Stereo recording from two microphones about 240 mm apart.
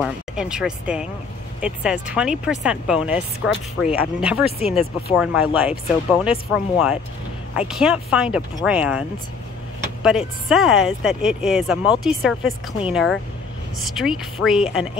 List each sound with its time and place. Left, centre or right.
0.0 s speech: centre
4.5 s speech: left
5.1 s speech: centre
10.0 s speech: centre